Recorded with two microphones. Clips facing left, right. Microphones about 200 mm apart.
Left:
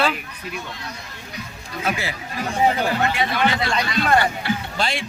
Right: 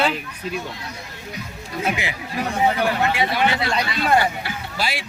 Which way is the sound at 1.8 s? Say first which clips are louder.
Even; 20° right (ahead or behind).